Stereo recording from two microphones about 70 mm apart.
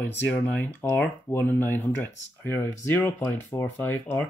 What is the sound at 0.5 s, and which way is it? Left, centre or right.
Speech, left.